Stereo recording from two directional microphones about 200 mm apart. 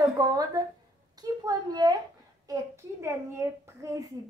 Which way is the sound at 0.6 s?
20° right (ahead or behind).